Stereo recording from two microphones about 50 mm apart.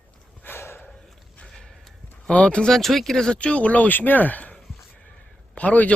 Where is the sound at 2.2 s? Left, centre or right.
Left.